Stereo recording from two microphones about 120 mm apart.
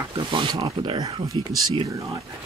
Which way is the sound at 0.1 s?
45° right (ahead or behind).